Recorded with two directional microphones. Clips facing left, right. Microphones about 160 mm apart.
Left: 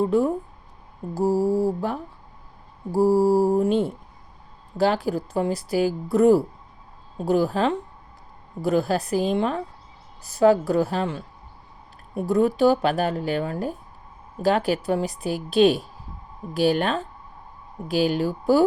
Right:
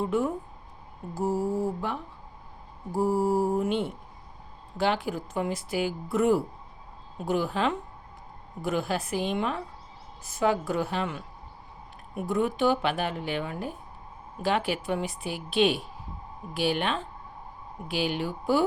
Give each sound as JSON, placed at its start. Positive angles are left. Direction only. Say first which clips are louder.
{"t": 0.0, "sound": "speech", "louder": "left 6 dB", "side_deg": 35}